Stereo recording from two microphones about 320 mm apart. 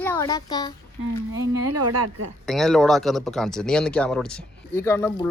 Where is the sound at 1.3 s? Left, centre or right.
Right.